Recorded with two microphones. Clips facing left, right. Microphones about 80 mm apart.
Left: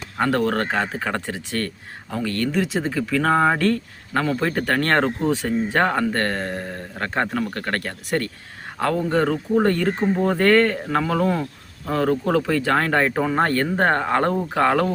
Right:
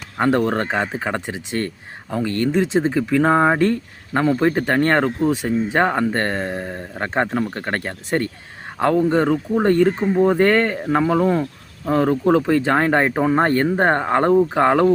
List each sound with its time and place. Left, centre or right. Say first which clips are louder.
0.2 s speech: right 2 dB; centre
5.4 s speech: right 2 dB; centre